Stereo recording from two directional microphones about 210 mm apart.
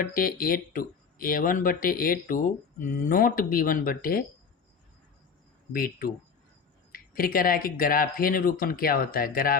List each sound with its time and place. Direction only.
0.0 s speech: 40° left (ahead or behind)
5.7 s speech: 45° left (ahead or behind)